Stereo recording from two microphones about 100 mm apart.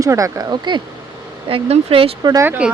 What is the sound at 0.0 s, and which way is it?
Speech, 35° right (ahead or behind).